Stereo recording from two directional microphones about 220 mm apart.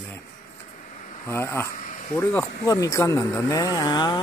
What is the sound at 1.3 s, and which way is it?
Speech, 10° left (ahead or behind).